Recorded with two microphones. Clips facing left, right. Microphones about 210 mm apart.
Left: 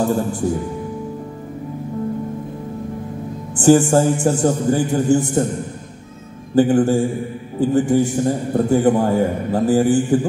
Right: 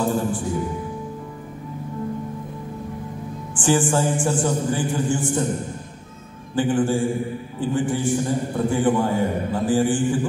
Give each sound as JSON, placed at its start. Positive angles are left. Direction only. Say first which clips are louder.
{"t": 3.5, "sound": "a man's voice", "louder": "left 8 dB", "side_deg": 40}
{"t": 6.5, "sound": "a man's voice", "louder": "left 6 dB", "side_deg": 40}